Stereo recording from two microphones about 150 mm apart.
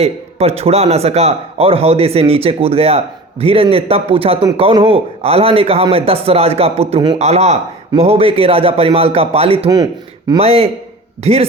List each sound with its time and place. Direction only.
0.0 s a man's voice: 45° right (ahead or behind)
9.6 s speech: 25° right (ahead or behind)
10.3 s a man's voice: 40° right (ahead or behind)